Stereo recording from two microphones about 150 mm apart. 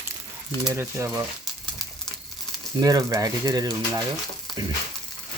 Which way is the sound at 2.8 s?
25° right (ahead or behind).